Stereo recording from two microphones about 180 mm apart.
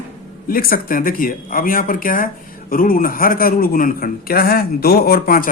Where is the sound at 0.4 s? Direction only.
55° left (ahead or behind).